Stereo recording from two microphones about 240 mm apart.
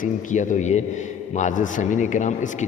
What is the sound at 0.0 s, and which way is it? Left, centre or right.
A man's voice, left.